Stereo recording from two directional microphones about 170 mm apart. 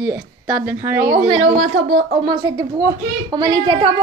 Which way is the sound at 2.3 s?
25° right (ahead or behind).